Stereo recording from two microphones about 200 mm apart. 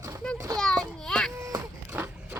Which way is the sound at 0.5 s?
5° left (ahead or behind).